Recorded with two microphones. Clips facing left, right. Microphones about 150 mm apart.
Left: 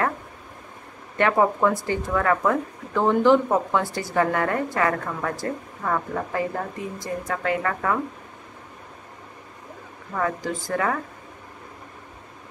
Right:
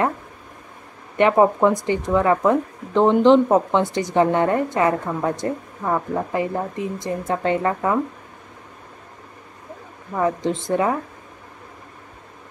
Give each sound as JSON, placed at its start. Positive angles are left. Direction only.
{"t": 1.1, "sound": "speech", "side_deg": -20}
{"t": 10.1, "sound": "speech", "side_deg": -20}